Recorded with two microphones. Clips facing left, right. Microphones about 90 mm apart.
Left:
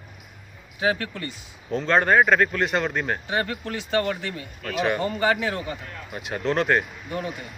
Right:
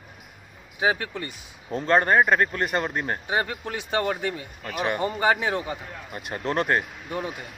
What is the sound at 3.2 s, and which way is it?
Speech, 20° right (ahead or behind).